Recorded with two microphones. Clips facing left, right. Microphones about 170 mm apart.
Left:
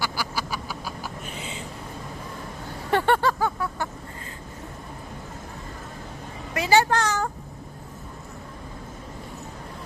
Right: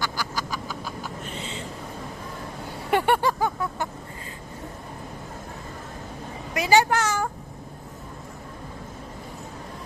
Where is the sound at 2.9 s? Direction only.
15° right (ahead or behind).